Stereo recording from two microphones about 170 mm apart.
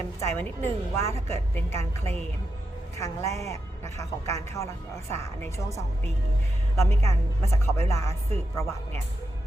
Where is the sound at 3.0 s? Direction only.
20° left (ahead or behind).